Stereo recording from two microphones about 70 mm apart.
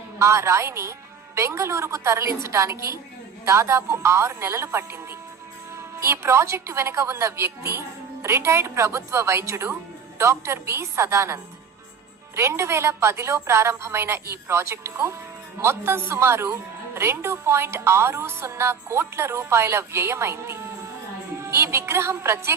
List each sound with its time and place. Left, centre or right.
0.2 s a woman's voice: right